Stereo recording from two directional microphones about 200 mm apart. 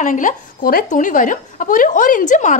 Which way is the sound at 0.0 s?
40° left (ahead or behind).